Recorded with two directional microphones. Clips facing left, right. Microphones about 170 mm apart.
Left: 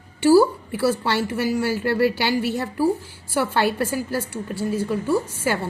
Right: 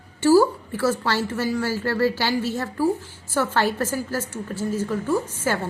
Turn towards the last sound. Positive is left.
turn(degrees=10)  # may be behind; listen again after turning